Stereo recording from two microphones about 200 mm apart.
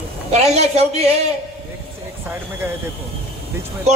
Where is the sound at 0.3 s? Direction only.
30° right (ahead or behind).